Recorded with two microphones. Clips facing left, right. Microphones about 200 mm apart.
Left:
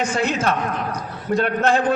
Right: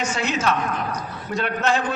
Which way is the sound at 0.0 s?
55° left (ahead or behind).